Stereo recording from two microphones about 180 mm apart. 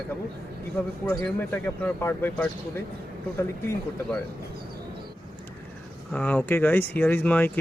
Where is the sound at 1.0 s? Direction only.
15° left (ahead or behind).